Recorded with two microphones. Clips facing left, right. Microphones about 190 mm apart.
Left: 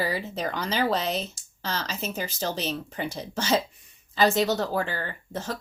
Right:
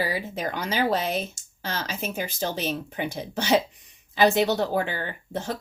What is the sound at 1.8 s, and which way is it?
Speech, 15° right (ahead or behind).